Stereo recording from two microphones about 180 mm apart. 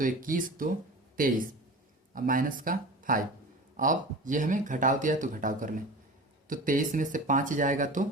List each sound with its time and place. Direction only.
0.0 s speech: 50° right (ahead or behind)
2.1 s speech: 50° right (ahead or behind)